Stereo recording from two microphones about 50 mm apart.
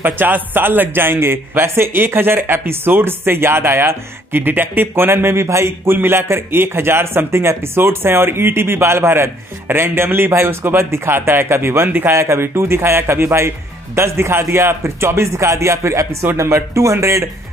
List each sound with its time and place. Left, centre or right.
0.0 s a man's voice: right
5.9 s a man's voice: right
12.1 s speech: right